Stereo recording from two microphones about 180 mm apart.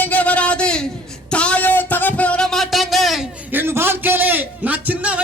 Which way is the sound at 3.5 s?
10° right (ahead or behind).